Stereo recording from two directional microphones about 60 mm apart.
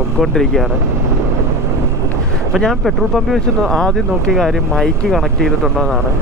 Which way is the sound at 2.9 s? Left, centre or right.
Centre.